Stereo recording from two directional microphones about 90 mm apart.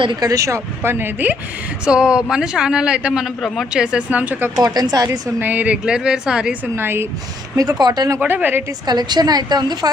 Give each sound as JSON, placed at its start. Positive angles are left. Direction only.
{"t": 0.2, "sound": "speech", "side_deg": -40}
{"t": 1.8, "sound": "a man's voice", "side_deg": -10}
{"t": 3.9, "sound": "a man's voice", "side_deg": -15}
{"t": 4.5, "sound": "a woman's voice", "side_deg": -45}
{"t": 5.4, "sound": "a man's voice", "side_deg": -20}
{"t": 6.7, "sound": "speech", "side_deg": -25}
{"t": 7.5, "sound": "a woman's voice", "side_deg": -40}
{"t": 8.2, "sound": "speech", "side_deg": -20}
{"t": 8.9, "sound": "a woman's voice", "side_deg": -50}